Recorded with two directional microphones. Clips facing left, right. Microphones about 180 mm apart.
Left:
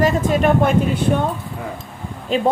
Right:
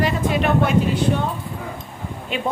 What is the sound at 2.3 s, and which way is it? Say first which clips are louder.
Speech: left 8 dB; 40° left (ahead or behind).